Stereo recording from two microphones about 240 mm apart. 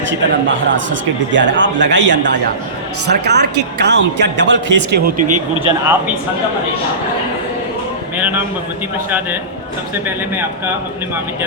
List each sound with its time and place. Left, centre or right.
0.1 s a man's voice: right
5.5 s speech: centre
8.1 s speech: centre